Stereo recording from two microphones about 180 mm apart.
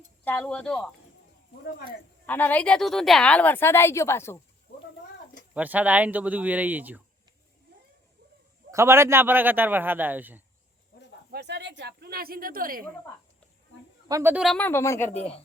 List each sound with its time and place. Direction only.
0.3 s speech: 5° left (ahead or behind)
2.2 s a woman's voice: 10° left (ahead or behind)
5.5 s a man's voice: 10° right (ahead or behind)
8.7 s a man's voice: 15° right (ahead or behind)
11.3 s speech: 70° right (ahead or behind); by 12.8 s 50° right (ahead or behind)
14.1 s a man's voice: 15° right (ahead or behind)
14.4 s a woman's voice: 5° left (ahead or behind)
15.1 s speech: 35° left (ahead or behind)